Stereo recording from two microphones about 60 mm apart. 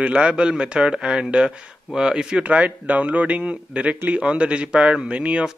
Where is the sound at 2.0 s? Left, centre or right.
Centre.